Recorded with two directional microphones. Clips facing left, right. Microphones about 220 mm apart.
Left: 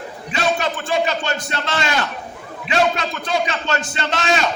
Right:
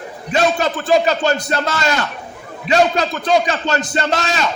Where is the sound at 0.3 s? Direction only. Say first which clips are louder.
Right 4 dB; 40° right (ahead or behind).